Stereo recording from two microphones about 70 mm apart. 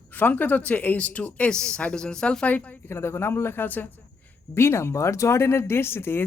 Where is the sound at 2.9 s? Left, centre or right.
Left.